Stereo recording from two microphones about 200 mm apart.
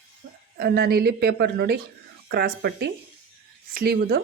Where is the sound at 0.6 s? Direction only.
50° right (ahead or behind).